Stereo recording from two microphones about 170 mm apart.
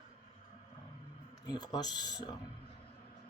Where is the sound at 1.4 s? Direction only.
25° left (ahead or behind).